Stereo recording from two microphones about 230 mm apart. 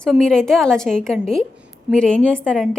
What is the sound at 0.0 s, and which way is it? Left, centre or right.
A woman's voice, centre.